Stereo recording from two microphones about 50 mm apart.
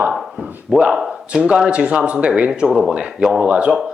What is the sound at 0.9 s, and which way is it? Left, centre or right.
Speech, centre.